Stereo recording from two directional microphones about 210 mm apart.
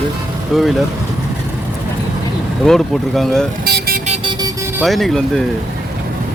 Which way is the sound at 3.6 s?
50° right (ahead or behind).